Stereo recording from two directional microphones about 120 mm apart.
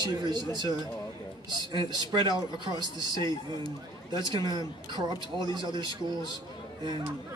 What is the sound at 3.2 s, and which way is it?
Speech, 35° left (ahead or behind).